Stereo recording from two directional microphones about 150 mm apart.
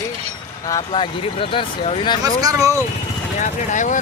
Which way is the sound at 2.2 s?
25° right (ahead or behind).